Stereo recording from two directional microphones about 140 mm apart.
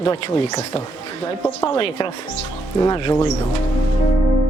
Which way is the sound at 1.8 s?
35° left (ahead or behind).